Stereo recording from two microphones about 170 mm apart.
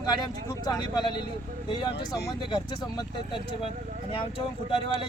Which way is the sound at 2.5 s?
25° left (ahead or behind).